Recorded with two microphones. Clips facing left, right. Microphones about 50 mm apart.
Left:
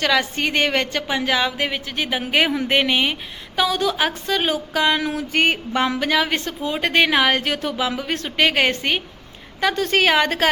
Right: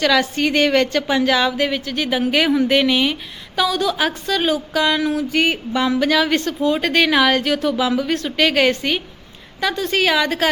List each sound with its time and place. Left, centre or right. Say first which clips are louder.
0.1 s a woman's voice: right 3 dB; centre; by 10.5 s left